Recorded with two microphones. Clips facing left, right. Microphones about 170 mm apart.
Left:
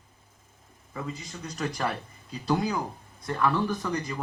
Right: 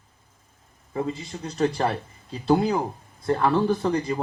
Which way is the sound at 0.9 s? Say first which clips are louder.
Right 8 dB; 30° right (ahead or behind).